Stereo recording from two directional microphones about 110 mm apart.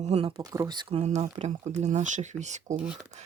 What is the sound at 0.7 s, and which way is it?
Speech, 45° right (ahead or behind).